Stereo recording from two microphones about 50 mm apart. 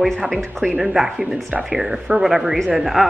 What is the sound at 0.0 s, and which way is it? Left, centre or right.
Speech, centre.